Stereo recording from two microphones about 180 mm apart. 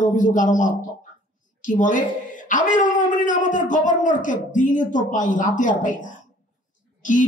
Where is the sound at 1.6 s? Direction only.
45° left (ahead or behind).